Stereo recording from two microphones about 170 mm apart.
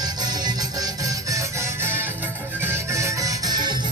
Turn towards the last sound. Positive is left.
turn(degrees=-25)  # may be behind; listen again after turning